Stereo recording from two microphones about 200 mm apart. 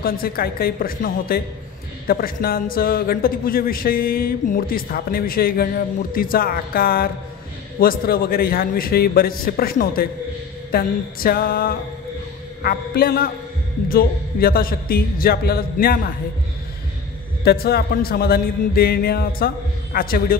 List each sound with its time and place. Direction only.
0.0 s a man's voice: 50° left (ahead or behind)
17.4 s a man's voice: 50° left (ahead or behind)